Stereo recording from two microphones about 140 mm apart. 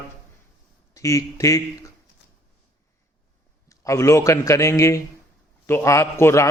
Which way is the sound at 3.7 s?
20° left (ahead or behind).